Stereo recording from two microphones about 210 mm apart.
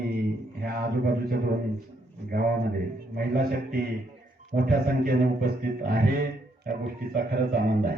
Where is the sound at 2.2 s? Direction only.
45° right (ahead or behind).